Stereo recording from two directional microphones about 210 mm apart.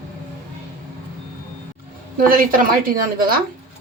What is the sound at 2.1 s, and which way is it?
A woman's voice, 45° right (ahead or behind).